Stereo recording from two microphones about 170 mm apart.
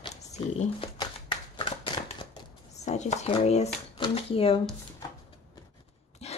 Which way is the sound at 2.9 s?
45° left (ahead or behind).